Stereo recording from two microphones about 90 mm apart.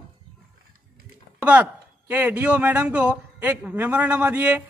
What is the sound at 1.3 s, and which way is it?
A man's voice, 15° right (ahead or behind).